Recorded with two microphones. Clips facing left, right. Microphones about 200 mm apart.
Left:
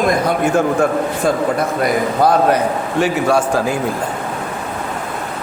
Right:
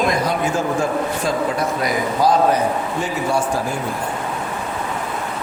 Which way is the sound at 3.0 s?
80° left.